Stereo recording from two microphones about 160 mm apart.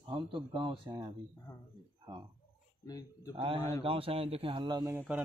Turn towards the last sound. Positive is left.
turn(degrees=-10)  # may be behind; listen again after turning